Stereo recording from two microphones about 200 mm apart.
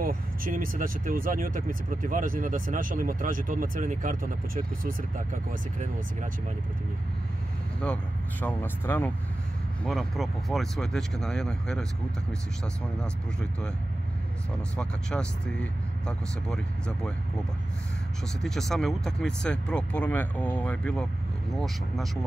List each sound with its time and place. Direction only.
0.0 s speech: 45° right (ahead or behind)
7.8 s speech: 5° left (ahead or behind)
13.0 s speech: 5° left (ahead or behind)
14.8 s speech: 5° left (ahead or behind)
18.4 s speech: centre (ahead or behind)